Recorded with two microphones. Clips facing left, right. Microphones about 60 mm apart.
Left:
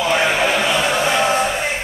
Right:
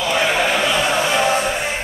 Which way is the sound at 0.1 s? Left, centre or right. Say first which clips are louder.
Even; centre.